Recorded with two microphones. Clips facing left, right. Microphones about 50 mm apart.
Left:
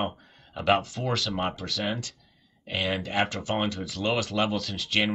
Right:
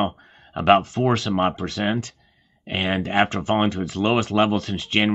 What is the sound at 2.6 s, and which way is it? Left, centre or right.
Speech, right.